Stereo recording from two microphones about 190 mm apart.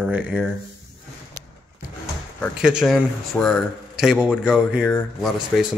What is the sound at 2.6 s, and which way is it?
Speech, 5° right (ahead or behind).